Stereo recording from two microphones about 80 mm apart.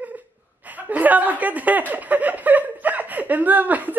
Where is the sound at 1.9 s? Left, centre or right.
Centre.